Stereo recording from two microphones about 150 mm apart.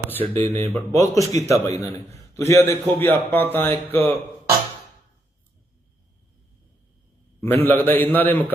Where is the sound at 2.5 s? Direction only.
20° left (ahead or behind).